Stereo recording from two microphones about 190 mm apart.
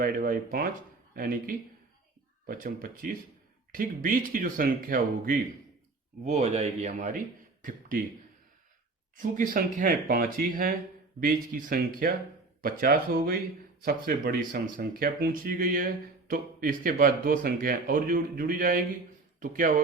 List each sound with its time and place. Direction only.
0.0 s speech: 50° right (ahead or behind)
6.2 s speech: 35° right (ahead or behind)
9.1 s speech: 45° right (ahead or behind)